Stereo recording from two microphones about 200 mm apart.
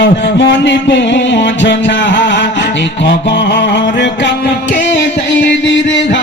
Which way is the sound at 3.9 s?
60° left (ahead or behind).